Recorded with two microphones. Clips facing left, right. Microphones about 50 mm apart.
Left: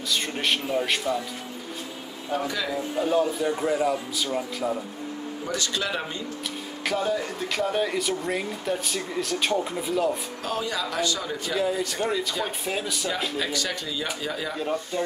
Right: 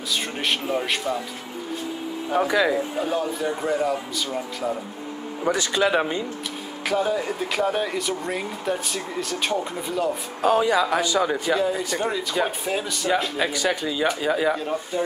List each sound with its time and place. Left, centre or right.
0.1 s speech: centre
2.3 s speech: right
3.0 s speech: centre
5.5 s speech: centre
6.8 s speech: centre
10.4 s speech: right
11.5 s speech: centre
13.4 s speech: centre
14.6 s speech: centre